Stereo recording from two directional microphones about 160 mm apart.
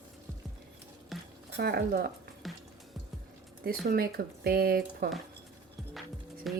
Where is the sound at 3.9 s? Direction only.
70° right (ahead or behind).